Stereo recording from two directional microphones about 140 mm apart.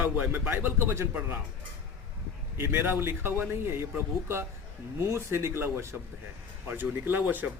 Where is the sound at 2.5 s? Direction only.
15° right (ahead or behind).